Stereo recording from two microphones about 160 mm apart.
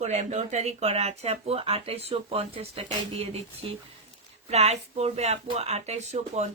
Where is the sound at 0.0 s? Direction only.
45° right (ahead or behind).